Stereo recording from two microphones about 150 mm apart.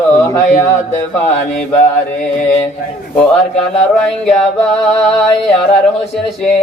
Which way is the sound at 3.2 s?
5° left (ahead or behind).